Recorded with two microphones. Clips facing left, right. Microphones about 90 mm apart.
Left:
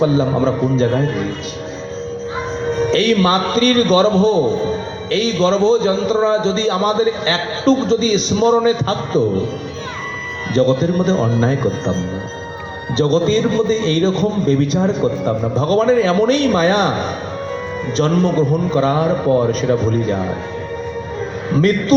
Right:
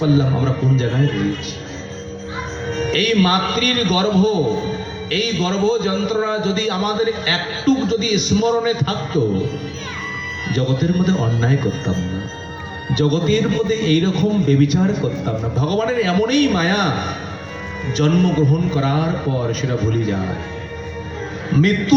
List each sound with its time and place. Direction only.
0.0 s a man's voice: 30° left (ahead or behind)
2.9 s a man's voice: 30° left (ahead or behind)
10.5 s a man's voice: 30° left (ahead or behind)
13.0 s a man's voice: 30° left (ahead or behind)
17.9 s a man's voice: 30° left (ahead or behind)